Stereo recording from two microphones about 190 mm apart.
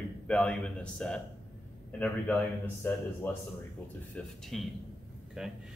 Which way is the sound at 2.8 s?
10° left (ahead or behind).